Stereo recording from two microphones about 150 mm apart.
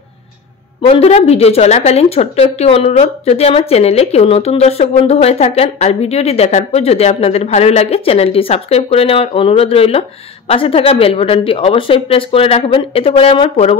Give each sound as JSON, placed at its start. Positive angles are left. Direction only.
{"t": 0.8, "sound": "a woman's voice", "side_deg": 45}